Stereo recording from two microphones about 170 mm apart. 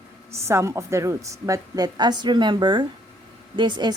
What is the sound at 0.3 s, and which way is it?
A woman's voice, 15° right (ahead or behind).